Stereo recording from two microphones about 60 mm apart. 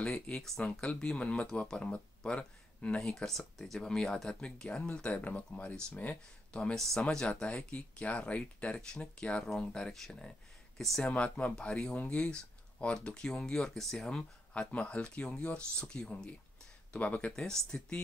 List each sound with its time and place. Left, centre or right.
0.0 s speech: centre
0.4 s speech: centre
0.7 s speech: centre
3.3 s speech: centre; by 6.1 s left
6.5 s speech: centre
11.1 s speech: left
16.9 s speech: left
17.5 s speech: centre